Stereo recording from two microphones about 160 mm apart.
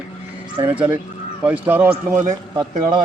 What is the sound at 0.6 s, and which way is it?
Speech, 10° right (ahead or behind).